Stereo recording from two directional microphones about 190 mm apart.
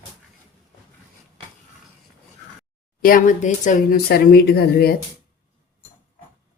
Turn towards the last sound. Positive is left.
turn(degrees=55)  # may be behind; listen again after turning